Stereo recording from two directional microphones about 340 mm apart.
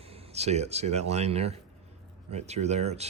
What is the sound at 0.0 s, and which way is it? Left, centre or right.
Speech, centre.